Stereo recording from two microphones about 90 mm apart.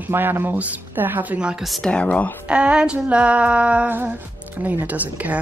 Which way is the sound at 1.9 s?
15° left (ahead or behind).